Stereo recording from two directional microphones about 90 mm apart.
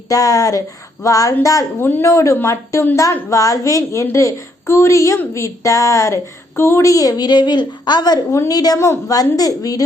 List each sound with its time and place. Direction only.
0.1 s a woman's voice: 40° left (ahead or behind)
1.8 s a woman's voice: 25° left (ahead or behind)